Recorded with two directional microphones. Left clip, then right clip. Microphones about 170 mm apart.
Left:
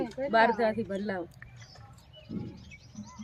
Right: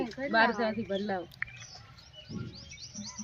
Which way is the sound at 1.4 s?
5° left (ahead or behind).